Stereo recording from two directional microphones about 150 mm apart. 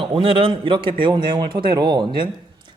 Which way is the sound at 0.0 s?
35° right (ahead or behind).